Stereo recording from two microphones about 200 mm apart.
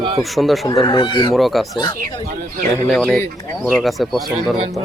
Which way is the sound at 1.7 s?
25° left (ahead or behind).